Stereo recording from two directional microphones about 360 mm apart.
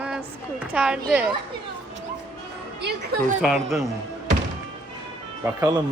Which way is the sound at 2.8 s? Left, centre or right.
Right.